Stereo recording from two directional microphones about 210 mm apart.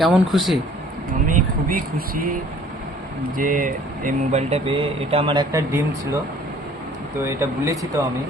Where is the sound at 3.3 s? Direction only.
40° right (ahead or behind); by 5.8 s 15° right (ahead or behind).